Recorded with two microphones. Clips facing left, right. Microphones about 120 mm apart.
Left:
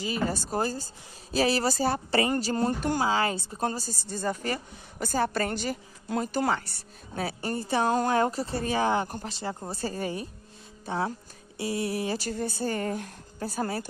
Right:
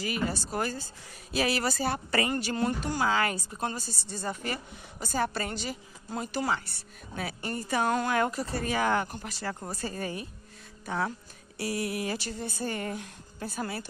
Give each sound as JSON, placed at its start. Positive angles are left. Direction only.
{"t": 0.0, "sound": "a woman's voice", "side_deg": 30}
{"t": 3.6, "sound": "a woman's voice", "side_deg": 40}
{"t": 4.9, "sound": "a woman's voice", "side_deg": 50}
{"t": 12.5, "sound": "a woman's voice", "side_deg": 35}